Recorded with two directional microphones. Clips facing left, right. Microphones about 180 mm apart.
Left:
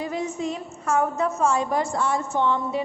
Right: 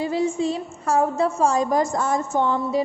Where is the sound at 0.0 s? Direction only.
30° right (ahead or behind).